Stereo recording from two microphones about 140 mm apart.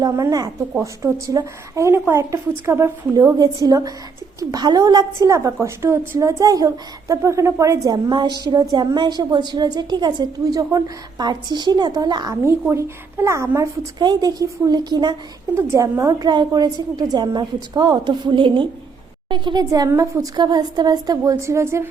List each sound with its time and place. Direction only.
0.0 s a woman's voice: 25° right (ahead or behind)
15.5 s a woman's voice: 20° right (ahead or behind)